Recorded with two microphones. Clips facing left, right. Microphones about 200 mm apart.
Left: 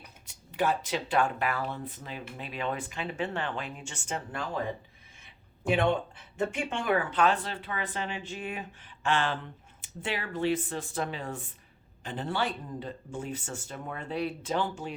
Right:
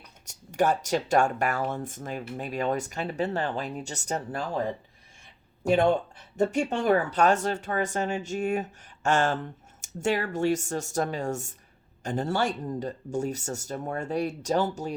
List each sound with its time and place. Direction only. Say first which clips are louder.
0.3 s speech: right 4 dB; 45° right (ahead or behind)
5.6 s speech: right 4 dB; 40° right (ahead or behind)